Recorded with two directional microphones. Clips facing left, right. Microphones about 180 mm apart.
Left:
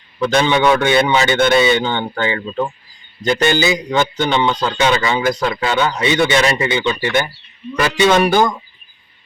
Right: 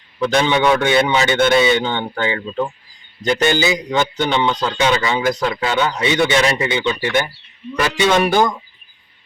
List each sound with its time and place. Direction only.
0.2 s a man's voice: 15° right (ahead or behind)